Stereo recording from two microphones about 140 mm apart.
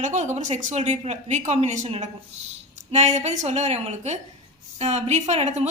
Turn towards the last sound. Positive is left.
turn(degrees=-55)  # may be behind; listen again after turning